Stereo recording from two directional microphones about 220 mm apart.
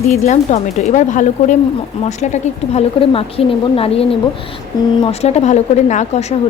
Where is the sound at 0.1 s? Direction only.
30° left (ahead or behind).